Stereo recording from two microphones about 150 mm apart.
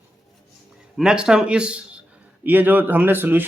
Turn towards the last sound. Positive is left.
turn(degrees=-15)  # may be behind; listen again after turning